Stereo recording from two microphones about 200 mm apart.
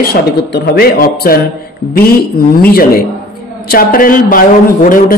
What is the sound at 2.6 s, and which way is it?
Speech, 50° left (ahead or behind).